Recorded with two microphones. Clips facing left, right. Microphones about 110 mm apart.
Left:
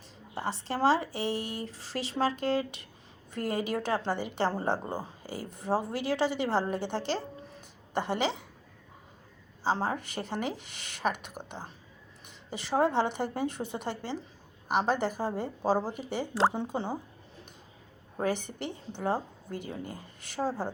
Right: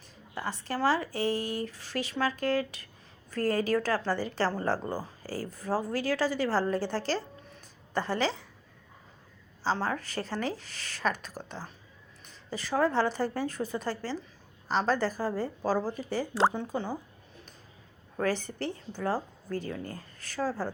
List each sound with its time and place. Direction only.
0.3 s a woman's voice: 30° left (ahead or behind)
9.7 s a woman's voice: 20° left (ahead or behind)
18.2 s a woman's voice: 20° left (ahead or behind)